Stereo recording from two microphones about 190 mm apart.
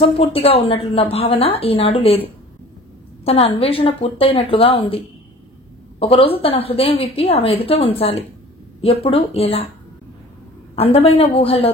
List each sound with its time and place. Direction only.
0.0 s a woman's voice: 30° left (ahead or behind)
10.8 s a woman's voice: 30° left (ahead or behind)